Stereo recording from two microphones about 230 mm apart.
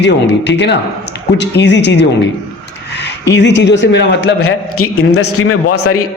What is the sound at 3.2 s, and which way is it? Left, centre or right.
A man's voice, left.